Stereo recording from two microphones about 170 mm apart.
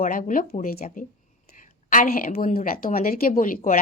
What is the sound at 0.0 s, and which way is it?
Speech, 55° left (ahead or behind).